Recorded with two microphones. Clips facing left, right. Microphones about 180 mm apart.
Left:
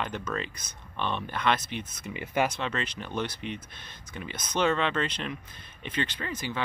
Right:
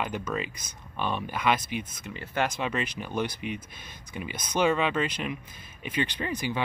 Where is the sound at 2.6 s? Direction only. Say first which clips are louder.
Right 2 dB; 10° right (ahead or behind).